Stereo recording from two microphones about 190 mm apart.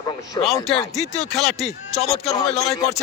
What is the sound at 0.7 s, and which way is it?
Speech, 35° left (ahead or behind).